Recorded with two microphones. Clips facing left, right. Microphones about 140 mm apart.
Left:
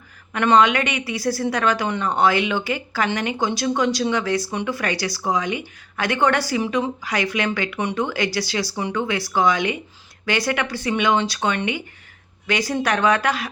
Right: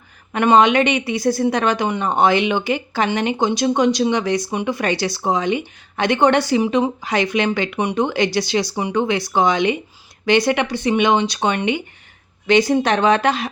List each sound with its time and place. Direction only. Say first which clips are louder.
0.3 s a woman's voice: right 3 dB; 20° right (ahead or behind)